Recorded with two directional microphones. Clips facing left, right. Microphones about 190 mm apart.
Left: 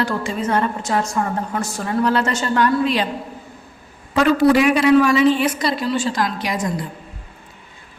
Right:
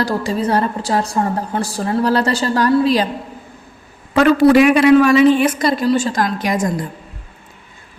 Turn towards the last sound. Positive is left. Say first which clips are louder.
# right 4 dB
turn(degrees=-45)  # may be behind; listen again after turning